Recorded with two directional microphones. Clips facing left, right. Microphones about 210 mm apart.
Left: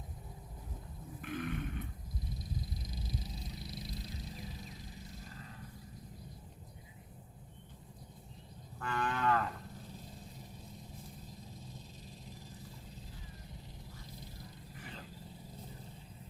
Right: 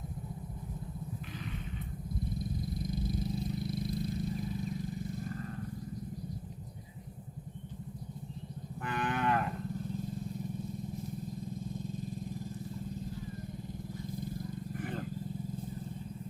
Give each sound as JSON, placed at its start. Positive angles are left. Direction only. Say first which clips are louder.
{"t": 1.2, "sound": "roaring cats", "louder": "left 4 dB", "side_deg": 55}
{"t": 2.4, "sound": "vehicle", "louder": "right 8 dB", "side_deg": -55}
{"t": 8.8, "sound": "moo", "louder": "right 2 dB", "side_deg": -20}
{"t": 11.5, "sound": "vehicle", "louder": "right 13 dB", "side_deg": -50}
{"t": 14.1, "sound": "vehicle", "louder": "right 14 dB", "side_deg": -50}